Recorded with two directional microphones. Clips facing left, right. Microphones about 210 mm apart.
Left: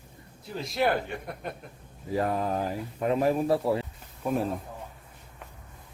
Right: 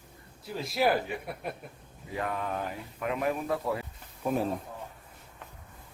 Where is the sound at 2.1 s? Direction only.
35° left (ahead or behind).